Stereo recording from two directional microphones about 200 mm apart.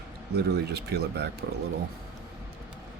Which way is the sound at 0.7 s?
55° right (ahead or behind).